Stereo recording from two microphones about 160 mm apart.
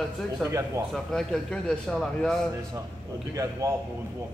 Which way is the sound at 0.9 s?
Centre (ahead or behind).